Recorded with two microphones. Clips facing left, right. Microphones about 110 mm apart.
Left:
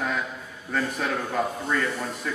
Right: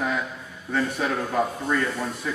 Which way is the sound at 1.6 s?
5° right (ahead or behind).